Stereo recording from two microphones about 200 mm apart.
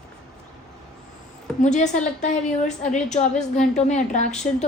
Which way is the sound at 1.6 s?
35° left (ahead or behind).